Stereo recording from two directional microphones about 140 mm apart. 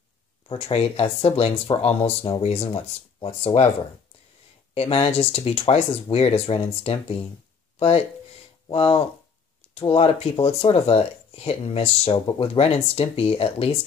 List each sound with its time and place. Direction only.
0.5 s speech: 45° left (ahead or behind)
4.7 s speech: 45° left (ahead or behind)
8.6 s speech: 40° left (ahead or behind)